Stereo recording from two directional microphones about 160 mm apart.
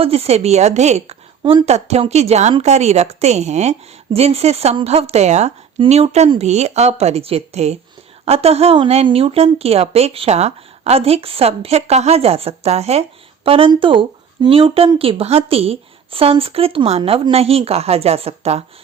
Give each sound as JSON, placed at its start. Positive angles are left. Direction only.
{"t": 0.0, "sound": "speech", "side_deg": -40}
{"t": 1.4, "sound": "speech", "side_deg": -30}
{"t": 1.6, "sound": "a woman's voice", "side_deg": -40}